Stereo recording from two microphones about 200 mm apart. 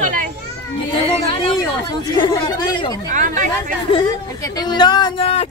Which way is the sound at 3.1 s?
40° right (ahead or behind).